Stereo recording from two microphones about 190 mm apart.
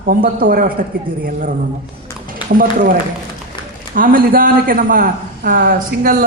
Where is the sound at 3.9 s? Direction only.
50° right (ahead or behind).